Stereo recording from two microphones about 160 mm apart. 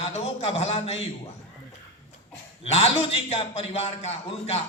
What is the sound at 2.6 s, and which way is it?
A man's voice, 40° left (ahead or behind).